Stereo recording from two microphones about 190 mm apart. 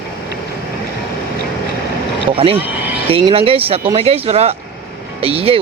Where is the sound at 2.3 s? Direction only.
30° right (ahead or behind).